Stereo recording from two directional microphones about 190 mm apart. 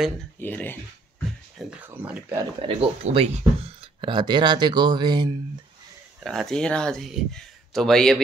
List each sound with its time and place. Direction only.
0.4 s speech: 10° left (ahead or behind)
1.7 s speech: 5° right (ahead or behind)
2.8 s speech: 30° right (ahead or behind)
6.2 s speech: centre (ahead or behind)